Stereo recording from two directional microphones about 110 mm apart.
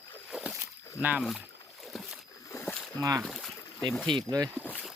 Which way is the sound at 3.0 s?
30° right (ahead or behind).